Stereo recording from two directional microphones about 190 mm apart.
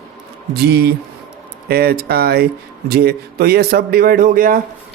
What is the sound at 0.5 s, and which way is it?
Speech, 55° right (ahead or behind).